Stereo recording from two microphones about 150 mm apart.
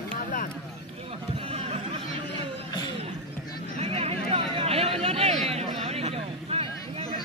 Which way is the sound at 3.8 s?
40° right (ahead or behind).